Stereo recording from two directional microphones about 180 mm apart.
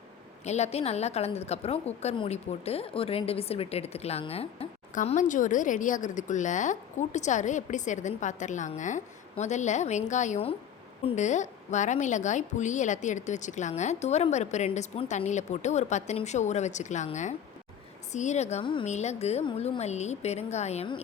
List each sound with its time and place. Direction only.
0.4 s a woman's voice: 40° left (ahead or behind)
18.9 s a woman's voice: 40° left (ahead or behind)